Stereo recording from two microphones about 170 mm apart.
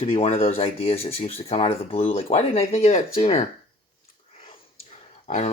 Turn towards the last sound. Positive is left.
turn(degrees=45)  # may be behind; listen again after turning